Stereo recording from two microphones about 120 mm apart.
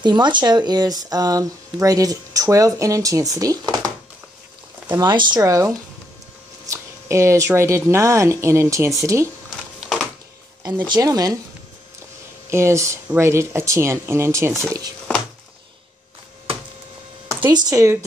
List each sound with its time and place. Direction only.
0.0 s speech: 40° right (ahead or behind)
4.9 s speech: 40° right (ahead or behind)
9.8 s a sound: centre (ahead or behind)
10.9 s speech: 30° right (ahead or behind)
12.4 s speech: 20° right (ahead or behind)
17.5 s speech: 35° right (ahead or behind)